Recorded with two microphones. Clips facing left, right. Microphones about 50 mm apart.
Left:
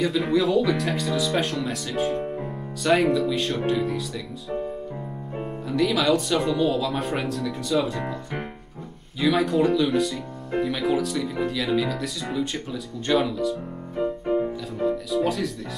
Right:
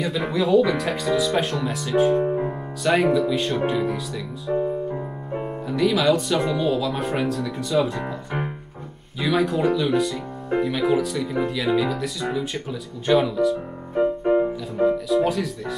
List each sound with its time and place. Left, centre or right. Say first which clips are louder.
0.0 s speech: left 1 dB; centre
2.2 s music: right 7 dB; right
2.8 s speech: right 1 dB; centre
15.0 s speech: right 3 dB; centre